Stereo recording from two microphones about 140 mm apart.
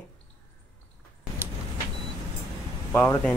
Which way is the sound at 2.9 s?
15° left (ahead or behind).